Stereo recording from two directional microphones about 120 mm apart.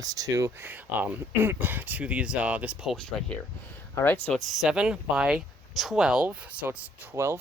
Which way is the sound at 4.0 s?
15° left (ahead or behind).